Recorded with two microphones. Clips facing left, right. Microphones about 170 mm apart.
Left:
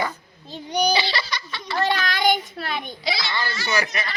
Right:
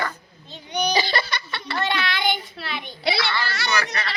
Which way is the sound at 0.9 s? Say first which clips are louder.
Right 2 dB; 50° right (ahead or behind).